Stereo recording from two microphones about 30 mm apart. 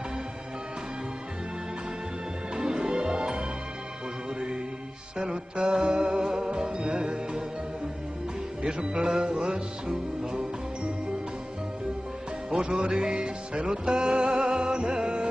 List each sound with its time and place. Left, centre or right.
2.5 s music: right
5.1 s music: right
5.6 s music: right
6.3 s music: right
8.6 s music: right
12.7 s music: right